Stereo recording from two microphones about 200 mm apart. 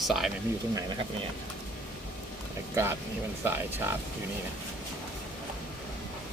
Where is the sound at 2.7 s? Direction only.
10° right (ahead or behind).